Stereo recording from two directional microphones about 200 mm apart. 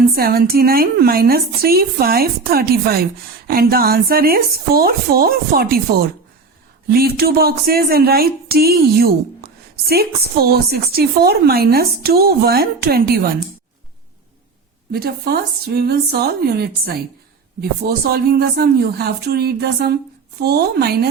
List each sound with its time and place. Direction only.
0.2 s speech: 50° right (ahead or behind)
14.9 s speech: 50° right (ahead or behind)